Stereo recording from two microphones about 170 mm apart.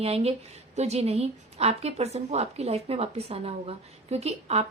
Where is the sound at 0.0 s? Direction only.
35° right (ahead or behind).